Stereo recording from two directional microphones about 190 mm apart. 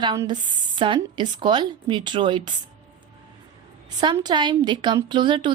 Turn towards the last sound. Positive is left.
turn(degrees=-25)  # may be behind; listen again after turning